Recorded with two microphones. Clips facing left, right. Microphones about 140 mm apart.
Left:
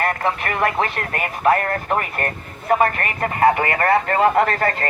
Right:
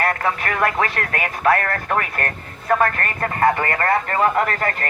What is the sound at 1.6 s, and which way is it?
Speech, 10° left (ahead or behind).